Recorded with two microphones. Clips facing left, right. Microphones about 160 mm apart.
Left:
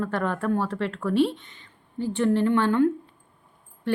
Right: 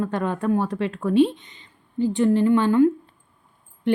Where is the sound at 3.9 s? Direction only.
20° right (ahead or behind).